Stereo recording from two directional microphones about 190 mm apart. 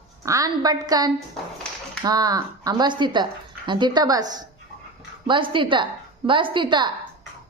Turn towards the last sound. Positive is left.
turn(degrees=-25)  # may be behind; listen again after turning